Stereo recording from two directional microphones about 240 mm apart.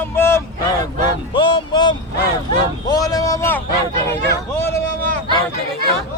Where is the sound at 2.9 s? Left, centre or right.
Centre.